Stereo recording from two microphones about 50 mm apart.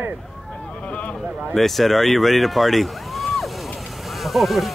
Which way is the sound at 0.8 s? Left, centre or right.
Left.